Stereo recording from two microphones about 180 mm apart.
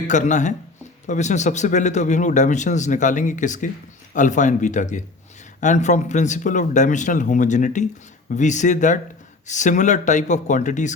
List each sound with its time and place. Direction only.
0.1 s a man's voice: 45° left (ahead or behind)